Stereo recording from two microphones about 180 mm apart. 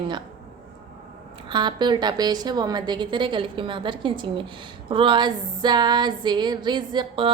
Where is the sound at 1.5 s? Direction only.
25° right (ahead or behind).